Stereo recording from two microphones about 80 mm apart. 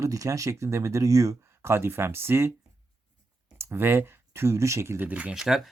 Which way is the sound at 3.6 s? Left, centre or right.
Right.